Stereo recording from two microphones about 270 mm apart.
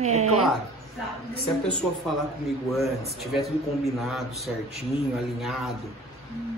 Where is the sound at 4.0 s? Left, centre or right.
Centre.